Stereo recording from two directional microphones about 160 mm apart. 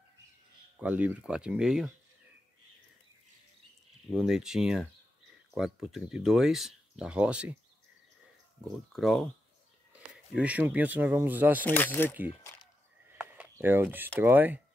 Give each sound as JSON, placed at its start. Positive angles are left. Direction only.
{"t": 0.7, "sound": "speech", "side_deg": -10}
{"t": 4.1, "sound": "speech", "side_deg": -5}
{"t": 8.6, "sound": "speech", "side_deg": 0}
{"t": 10.3, "sound": "speech", "side_deg": -10}
{"t": 11.6, "sound": "speech", "side_deg": 10}
{"t": 12.1, "sound": "speech", "side_deg": -10}
{"t": 13.2, "sound": "a sound", "side_deg": -10}
{"t": 14.2, "sound": "speech", "side_deg": -10}